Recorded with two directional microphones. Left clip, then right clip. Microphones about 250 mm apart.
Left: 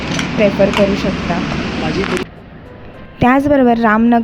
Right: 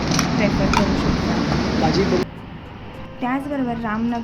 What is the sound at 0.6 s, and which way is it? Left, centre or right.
Speech, left.